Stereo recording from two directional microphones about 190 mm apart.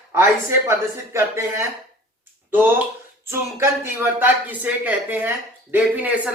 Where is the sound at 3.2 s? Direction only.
15° right (ahead or behind).